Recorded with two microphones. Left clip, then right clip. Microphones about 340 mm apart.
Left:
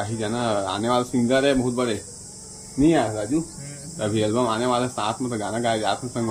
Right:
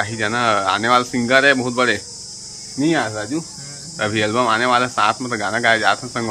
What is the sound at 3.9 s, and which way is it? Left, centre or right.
Speech, centre.